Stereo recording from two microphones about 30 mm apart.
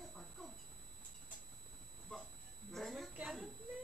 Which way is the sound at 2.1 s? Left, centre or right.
Centre.